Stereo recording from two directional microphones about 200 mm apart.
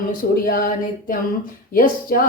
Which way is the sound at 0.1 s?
45° left (ahead or behind).